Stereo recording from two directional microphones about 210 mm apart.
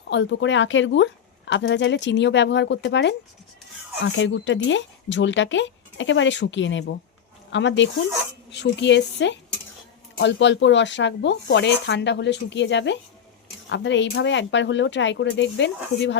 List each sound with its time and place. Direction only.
0.1 s speech: 55° left (ahead or behind)